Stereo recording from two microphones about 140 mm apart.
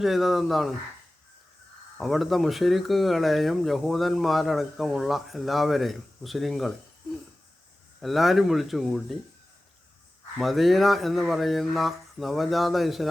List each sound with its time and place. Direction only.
0.0 s speech: centre (ahead or behind)
2.0 s speech: centre (ahead or behind)
8.0 s speech: centre (ahead or behind)
10.3 s speech: centre (ahead or behind)